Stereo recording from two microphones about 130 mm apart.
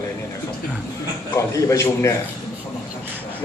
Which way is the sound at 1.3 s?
25° left (ahead or behind).